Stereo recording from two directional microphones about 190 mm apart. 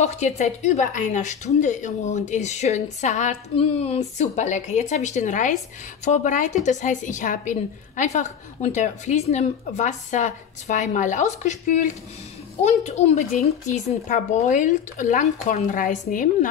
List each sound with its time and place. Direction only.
0.0 s a woman's voice: 35° left (ahead or behind)